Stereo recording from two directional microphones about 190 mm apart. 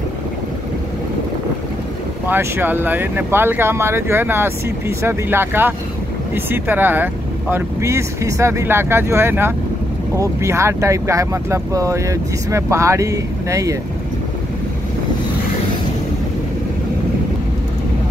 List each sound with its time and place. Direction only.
2.2 s speech: 10° right (ahead or behind)